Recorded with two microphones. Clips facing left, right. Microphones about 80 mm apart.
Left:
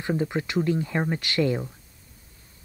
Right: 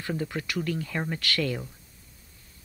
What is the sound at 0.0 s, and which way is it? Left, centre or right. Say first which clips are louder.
Speech: left 5 dB; left.